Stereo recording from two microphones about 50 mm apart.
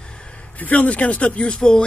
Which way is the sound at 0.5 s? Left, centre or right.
Left.